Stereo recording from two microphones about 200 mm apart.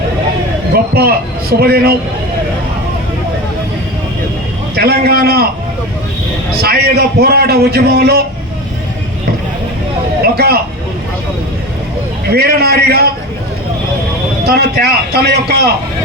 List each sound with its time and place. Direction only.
0.9 s a man's voice: 50° right (ahead or behind)
4.7 s a man's voice: 50° right (ahead or behind)
6.6 s a man's voice: 50° right (ahead or behind)
10.3 s vehicle: 50° right (ahead or behind)
12.3 s a man's voice: 50° right (ahead or behind)
14.4 s a man's voice: 50° right (ahead or behind)